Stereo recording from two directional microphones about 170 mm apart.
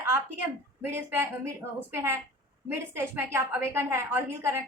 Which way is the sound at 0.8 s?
15° right (ahead or behind).